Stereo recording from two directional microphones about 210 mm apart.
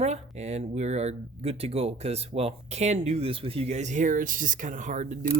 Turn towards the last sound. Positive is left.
turn(degrees=-35)  # may be behind; listen again after turning